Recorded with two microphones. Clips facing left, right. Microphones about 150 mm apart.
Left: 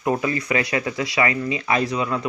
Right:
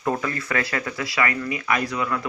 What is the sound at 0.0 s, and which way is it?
Speech, 20° left (ahead or behind).